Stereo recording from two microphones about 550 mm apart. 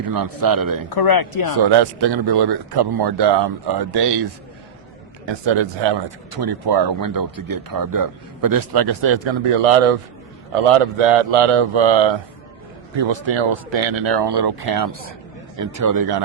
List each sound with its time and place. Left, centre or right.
0.1 s speech: right
0.9 s speech: left
1.5 s speech: right
10.5 s speech: right